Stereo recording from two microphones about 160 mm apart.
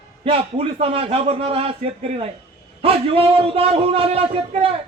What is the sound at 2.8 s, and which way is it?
Speech, 35° right (ahead or behind).